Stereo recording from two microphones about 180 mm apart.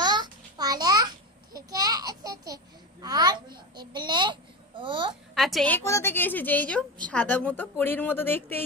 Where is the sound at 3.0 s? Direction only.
25° right (ahead or behind).